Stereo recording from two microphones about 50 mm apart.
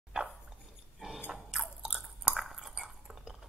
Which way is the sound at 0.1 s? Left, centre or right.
Centre.